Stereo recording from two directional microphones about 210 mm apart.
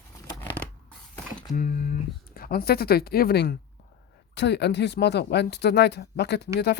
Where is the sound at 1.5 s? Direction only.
40° left (ahead or behind).